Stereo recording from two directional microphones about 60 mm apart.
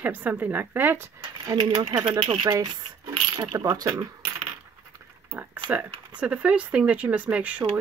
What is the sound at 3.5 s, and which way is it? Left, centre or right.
Speech, right.